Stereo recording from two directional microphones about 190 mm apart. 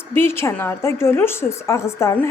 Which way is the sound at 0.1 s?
10° left (ahead or behind).